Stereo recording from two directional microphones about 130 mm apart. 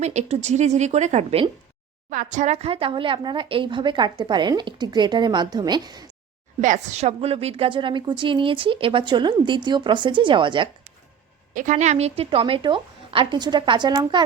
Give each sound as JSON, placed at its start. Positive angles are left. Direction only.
{"t": 0.0, "sound": "a woman's voice", "side_deg": -60}
{"t": 2.0, "sound": "speech", "side_deg": -75}
{"t": 6.6, "sound": "speech", "side_deg": -70}
{"t": 11.5, "sound": "a woman's voice", "side_deg": -75}